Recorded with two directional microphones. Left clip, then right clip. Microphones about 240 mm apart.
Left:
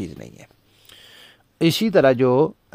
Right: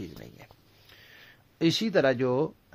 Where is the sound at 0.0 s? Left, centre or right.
Left.